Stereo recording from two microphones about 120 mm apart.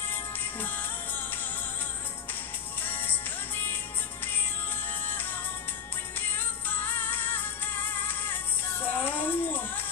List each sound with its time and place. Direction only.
0.1 s music: 15° left (ahead or behind)
2.8 s music: 15° left (ahead or behind)
6.1 s music: 15° left (ahead or behind)